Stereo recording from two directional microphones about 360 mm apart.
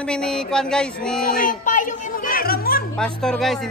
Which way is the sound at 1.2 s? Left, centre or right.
Left.